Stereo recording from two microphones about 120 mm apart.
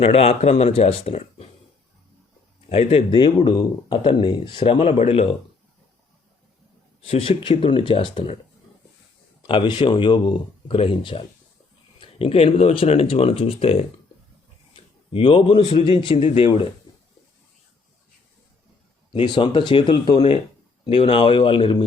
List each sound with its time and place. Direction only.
0.0 s speech: 55° left (ahead or behind)
2.6 s speech: 55° left (ahead or behind)
3.2 s speech: 40° left (ahead or behind)
7.1 s speech: 50° left (ahead or behind)
9.5 s speech: 40° left (ahead or behind)
19.1 s speech: 40° left (ahead or behind)